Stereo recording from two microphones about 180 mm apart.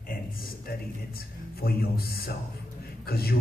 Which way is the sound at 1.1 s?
55° left (ahead or behind).